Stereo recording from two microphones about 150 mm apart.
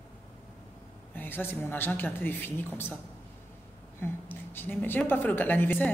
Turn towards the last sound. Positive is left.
turn(degrees=10)  # may be behind; listen again after turning